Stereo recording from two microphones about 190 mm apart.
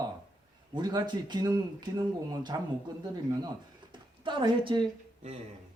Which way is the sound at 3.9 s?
25° right (ahead or behind).